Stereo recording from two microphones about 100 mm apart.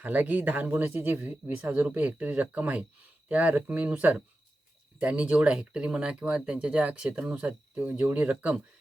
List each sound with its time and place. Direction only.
0.0 s speech: 15° right (ahead or behind)